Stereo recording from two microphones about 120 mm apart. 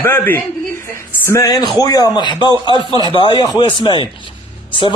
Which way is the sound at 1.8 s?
35° left (ahead or behind).